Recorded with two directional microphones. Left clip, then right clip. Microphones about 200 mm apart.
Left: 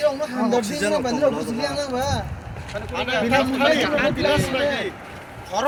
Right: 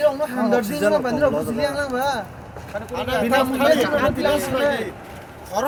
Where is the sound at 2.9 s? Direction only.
65° right (ahead or behind).